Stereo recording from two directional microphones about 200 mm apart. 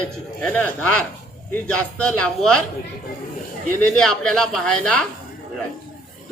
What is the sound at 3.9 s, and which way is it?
A man's voice, 5° left (ahead or behind).